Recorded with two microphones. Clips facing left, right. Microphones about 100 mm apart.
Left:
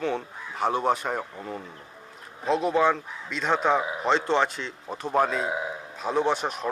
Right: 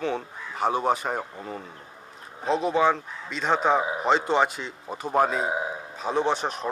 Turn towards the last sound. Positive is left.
turn(degrees=0)  # may be behind; listen again after turning